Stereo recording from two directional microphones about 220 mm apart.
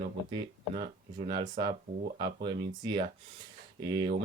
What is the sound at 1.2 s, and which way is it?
Speech, 20° right (ahead or behind).